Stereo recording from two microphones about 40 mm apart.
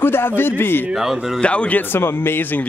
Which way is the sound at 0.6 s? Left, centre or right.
Left.